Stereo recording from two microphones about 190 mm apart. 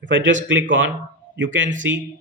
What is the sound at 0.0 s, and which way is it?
Speech, 75° right (ahead or behind).